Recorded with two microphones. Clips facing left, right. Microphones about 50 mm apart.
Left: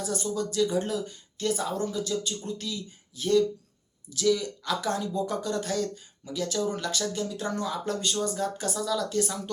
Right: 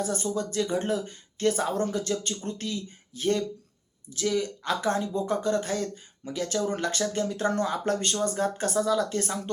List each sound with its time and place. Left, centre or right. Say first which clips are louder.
0.0 s speech: right 1 dB; right